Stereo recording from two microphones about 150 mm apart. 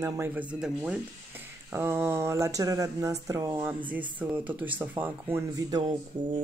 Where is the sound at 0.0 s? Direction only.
15° right (ahead or behind).